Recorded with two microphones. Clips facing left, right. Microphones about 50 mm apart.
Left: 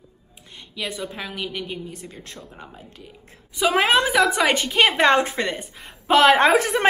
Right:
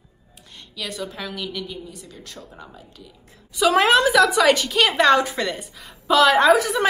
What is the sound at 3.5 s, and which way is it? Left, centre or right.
A woman's voice, left.